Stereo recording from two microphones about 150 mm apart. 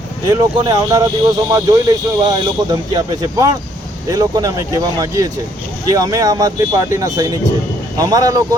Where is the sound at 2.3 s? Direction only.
25° right (ahead or behind).